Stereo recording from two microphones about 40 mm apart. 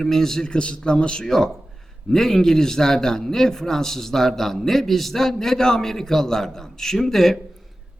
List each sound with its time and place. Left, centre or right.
0.0 s a man's voice: centre
0.5 s speech: left
2.0 s a man's voice: centre